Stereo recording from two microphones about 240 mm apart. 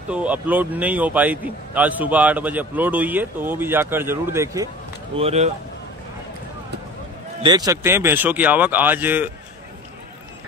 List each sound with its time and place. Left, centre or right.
0.1 s a man's voice: centre
5.1 s speech: right
7.4 s a man's voice: centre